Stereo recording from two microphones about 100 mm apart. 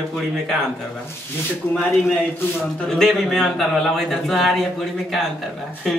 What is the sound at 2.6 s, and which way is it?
Speech, 5° left (ahead or behind).